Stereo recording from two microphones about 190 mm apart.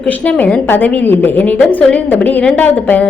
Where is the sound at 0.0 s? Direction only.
5° left (ahead or behind).